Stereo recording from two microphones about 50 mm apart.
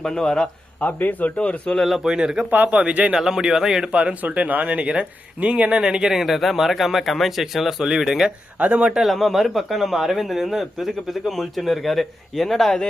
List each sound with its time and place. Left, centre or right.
0.0 s a man's voice: centre
0.8 s speech: left
1.4 s speech: left
1.7 s a man's voice: centre
2.0 s speech: centre
2.5 s speech: right
2.7 s speech: right
3.2 s speech: centre
4.2 s speech: right; by 8.3 s centre
8.5 s speech: right
9.0 s a man's voice: centre